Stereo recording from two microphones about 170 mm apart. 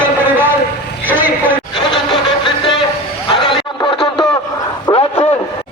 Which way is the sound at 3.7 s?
30° left (ahead or behind).